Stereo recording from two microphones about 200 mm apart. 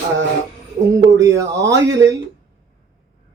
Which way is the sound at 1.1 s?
15° right (ahead or behind).